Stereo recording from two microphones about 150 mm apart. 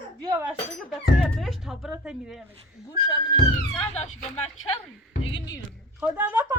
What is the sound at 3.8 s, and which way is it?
Speech, 45° left (ahead or behind).